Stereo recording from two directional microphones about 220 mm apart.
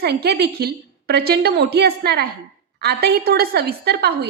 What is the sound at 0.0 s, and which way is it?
A woman's voice, 45° right (ahead or behind).